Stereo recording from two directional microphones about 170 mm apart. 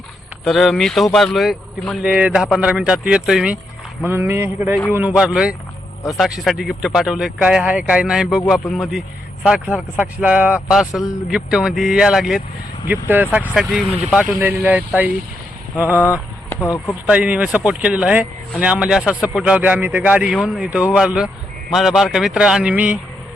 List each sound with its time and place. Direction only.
0.4 s speech: centre (ahead or behind)
14.3 s speech: 15° right (ahead or behind)
16.5 s speech: 15° left (ahead or behind)
17.1 s speech: 10° right (ahead or behind)